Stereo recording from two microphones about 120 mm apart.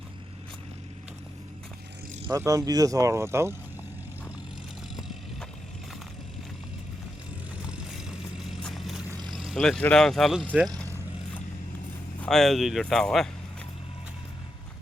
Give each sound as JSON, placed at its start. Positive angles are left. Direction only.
{"t": 2.3, "sound": "speech", "side_deg": -25}
{"t": 4.9, "sound": "vehicle", "side_deg": 0}
{"t": 7.6, "sound": "vehicle", "side_deg": -5}
{"t": 9.8, "sound": "speech", "side_deg": 5}
{"t": 12.2, "sound": "speech", "side_deg": 5}